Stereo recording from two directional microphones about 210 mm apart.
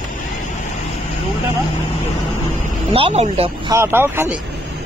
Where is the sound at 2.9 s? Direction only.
30° right (ahead or behind).